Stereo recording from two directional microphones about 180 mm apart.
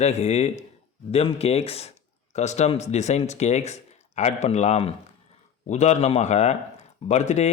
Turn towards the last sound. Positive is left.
turn(degrees=40)  # may be behind; listen again after turning